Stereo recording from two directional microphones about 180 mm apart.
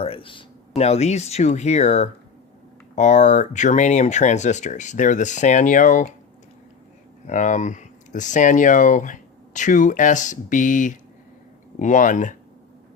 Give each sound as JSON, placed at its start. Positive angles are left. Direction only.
{"t": 0.0, "sound": "speech", "side_deg": 30}
{"t": 7.3, "sound": "speech", "side_deg": 45}